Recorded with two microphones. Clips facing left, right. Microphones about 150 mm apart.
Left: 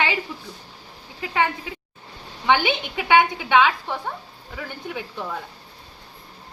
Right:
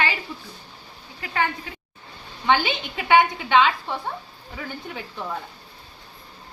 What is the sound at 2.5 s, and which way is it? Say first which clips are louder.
Speech: left 1 dB; 10° left (ahead or behind).